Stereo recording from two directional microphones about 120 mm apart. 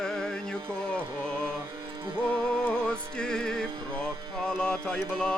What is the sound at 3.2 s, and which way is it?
Music, 5° left (ahead or behind).